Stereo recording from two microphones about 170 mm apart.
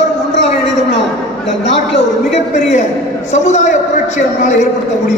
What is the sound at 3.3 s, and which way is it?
Speech, 45° left (ahead or behind).